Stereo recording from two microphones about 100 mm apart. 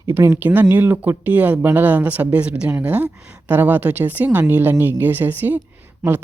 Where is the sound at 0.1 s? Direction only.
25° right (ahead or behind).